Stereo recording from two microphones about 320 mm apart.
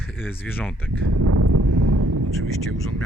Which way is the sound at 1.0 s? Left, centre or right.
Right.